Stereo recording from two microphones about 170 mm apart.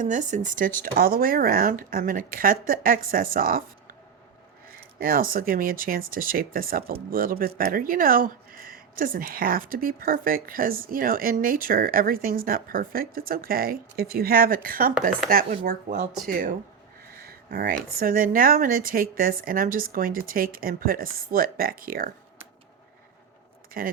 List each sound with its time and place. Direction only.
0.0 s speech: 45° right (ahead or behind)
4.9 s speech: 55° right (ahead or behind)
17.0 s a sound: 60° right (ahead or behind)
18.0 s speech: 55° right (ahead or behind)
23.8 s speech: 55° right (ahead or behind)